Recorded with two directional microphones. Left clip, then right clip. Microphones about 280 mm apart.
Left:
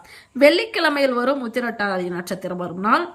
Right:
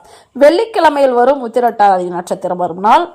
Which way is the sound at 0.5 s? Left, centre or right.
Centre.